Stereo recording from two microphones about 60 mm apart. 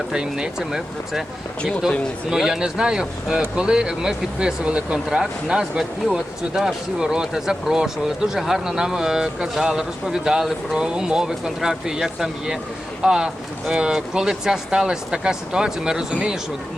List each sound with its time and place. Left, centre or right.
0.1 s speech: centre
2.3 s speech: centre